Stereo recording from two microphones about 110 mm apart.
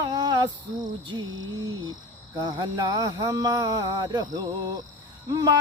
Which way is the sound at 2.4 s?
45° right (ahead or behind).